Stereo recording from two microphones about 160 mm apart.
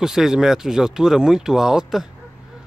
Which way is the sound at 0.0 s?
5° right (ahead or behind).